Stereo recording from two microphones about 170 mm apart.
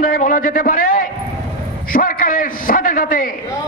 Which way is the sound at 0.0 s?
55° left (ahead or behind).